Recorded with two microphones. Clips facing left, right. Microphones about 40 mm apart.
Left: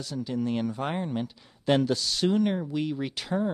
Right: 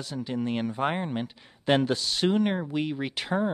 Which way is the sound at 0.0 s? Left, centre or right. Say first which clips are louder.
Even; right.